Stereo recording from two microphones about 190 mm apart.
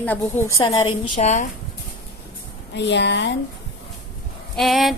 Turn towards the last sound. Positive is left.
turn(degrees=0)  # may be behind; listen again after turning